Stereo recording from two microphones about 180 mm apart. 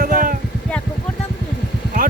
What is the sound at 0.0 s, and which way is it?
Vehicle, 50° right (ahead or behind).